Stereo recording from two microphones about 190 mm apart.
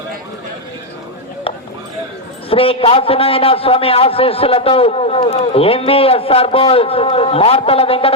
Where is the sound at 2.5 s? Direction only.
30° left (ahead or behind).